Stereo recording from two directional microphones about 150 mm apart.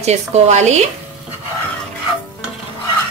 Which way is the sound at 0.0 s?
50° right (ahead or behind).